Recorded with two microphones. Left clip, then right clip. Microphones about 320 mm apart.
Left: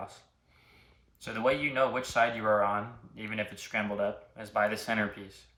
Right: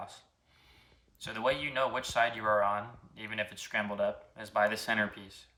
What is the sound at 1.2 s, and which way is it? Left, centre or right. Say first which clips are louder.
Speech: left 3 dB; centre.